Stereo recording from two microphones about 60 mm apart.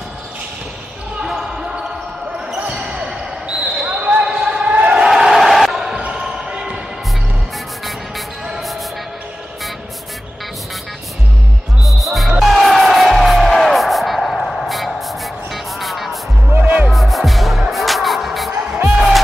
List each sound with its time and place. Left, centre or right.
1.2 s basketball bounce: centre
5.0 s crowd: centre
6.2 s basketball bounce: centre
8.5 s music: centre
11.8 s music: centre
13.6 s a sound: centre
16.4 s music: right
16.8 s music: centre